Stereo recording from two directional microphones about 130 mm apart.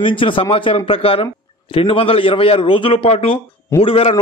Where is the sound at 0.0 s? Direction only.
40° left (ahead or behind).